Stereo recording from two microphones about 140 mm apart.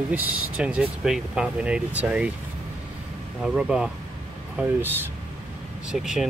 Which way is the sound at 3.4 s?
5° right (ahead or behind).